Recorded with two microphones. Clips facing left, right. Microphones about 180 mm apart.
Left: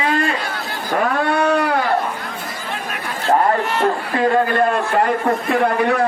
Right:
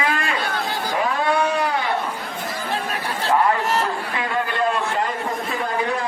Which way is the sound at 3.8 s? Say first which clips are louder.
Left 8 dB; 45° left (ahead or behind).